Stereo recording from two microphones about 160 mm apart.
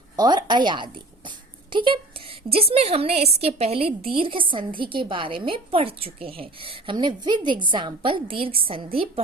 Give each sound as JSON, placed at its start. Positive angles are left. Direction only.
{"t": 0.2, "sound": "a woman's voice", "side_deg": -25}